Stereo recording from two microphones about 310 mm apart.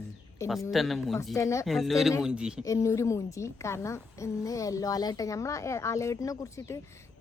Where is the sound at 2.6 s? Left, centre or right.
Centre.